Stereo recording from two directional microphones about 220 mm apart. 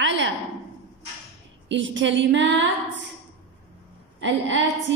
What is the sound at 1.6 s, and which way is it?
Speech, 60° right (ahead or behind).